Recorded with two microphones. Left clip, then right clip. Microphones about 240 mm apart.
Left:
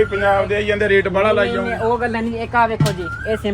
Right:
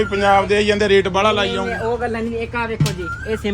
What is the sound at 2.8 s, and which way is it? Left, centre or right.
Speech, centre.